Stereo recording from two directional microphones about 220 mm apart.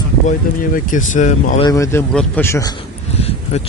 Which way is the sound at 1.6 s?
15° left (ahead or behind).